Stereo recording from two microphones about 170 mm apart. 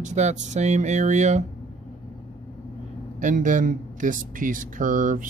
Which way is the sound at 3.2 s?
50° right (ahead or behind).